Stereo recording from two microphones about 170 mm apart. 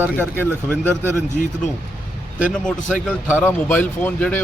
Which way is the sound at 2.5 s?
5° left (ahead or behind).